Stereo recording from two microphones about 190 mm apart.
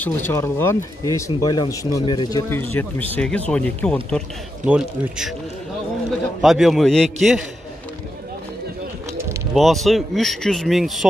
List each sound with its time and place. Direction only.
0.0 s speech: 10° left (ahead or behind)
2.5 s speech: 10° left (ahead or behind)
4.6 s speech: 5° right (ahead or behind)
6.4 s speech: centre (ahead or behind)
9.5 s speech: centre (ahead or behind)